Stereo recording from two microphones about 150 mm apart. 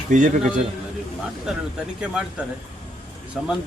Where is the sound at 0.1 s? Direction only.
60° right (ahead or behind).